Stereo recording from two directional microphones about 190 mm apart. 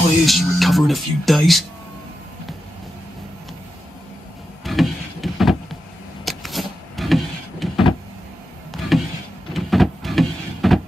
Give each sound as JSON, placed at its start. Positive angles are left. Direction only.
{"t": 0.2, "sound": "speech", "side_deg": 0}
{"t": 4.6, "sound": "vehicle", "side_deg": 0}
{"t": 6.2, "sound": "a sound", "side_deg": 0}
{"t": 8.7, "sound": "power windows", "side_deg": 0}